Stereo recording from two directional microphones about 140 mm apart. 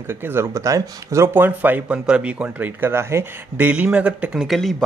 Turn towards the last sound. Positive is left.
turn(degrees=0)  # may be behind; listen again after turning